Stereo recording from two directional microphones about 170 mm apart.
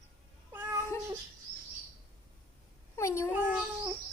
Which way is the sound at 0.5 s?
10° right (ahead or behind).